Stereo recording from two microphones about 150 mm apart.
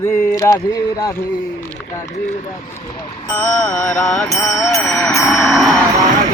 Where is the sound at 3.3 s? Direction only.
10° left (ahead or behind).